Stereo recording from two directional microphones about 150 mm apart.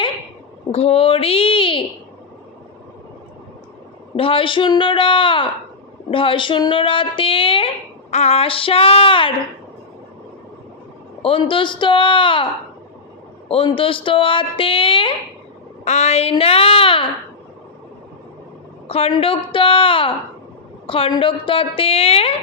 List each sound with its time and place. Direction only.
0.7 s a woman's voice: 40° left (ahead or behind)
4.2 s a woman's voice: 35° left (ahead or behind)
11.2 s a woman's voice: 35° left (ahead or behind)
13.5 s a woman's voice: 35° left (ahead or behind)
15.8 s a woman's voice: 50° left (ahead or behind)
18.9 s a woman's voice: 40° left (ahead or behind)